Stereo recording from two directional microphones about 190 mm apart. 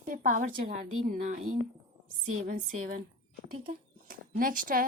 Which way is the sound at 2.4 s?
45° right (ahead or behind).